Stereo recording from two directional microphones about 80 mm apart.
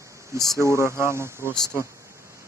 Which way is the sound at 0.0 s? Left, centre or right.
Right.